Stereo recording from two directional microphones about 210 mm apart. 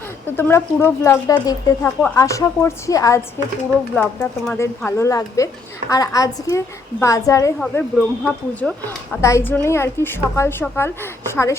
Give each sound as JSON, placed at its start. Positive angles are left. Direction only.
{"t": 0.3, "sound": "a woman's voice", "side_deg": 10}